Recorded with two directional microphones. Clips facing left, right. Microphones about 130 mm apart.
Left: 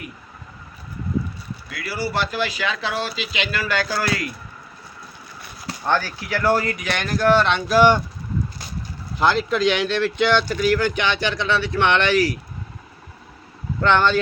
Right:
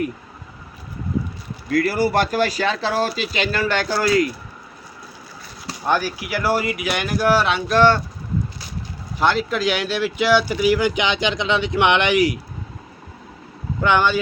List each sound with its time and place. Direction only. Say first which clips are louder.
1.7 s speech: right 8 dB; 50° right (ahead or behind); by 4.3 s 25° right (ahead or behind)
5.8 s speech: right 1 dB; 15° right (ahead or behind)
7.8 s speech: even; 15° left (ahead or behind)
9.1 s speech: even; centre (ahead or behind)
13.8 s speech: even; 10° right (ahead or behind)